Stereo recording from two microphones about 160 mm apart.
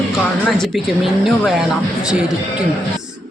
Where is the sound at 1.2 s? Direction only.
5° right (ahead or behind).